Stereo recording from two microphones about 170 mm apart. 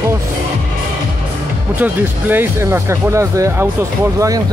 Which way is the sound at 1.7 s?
10° right (ahead or behind).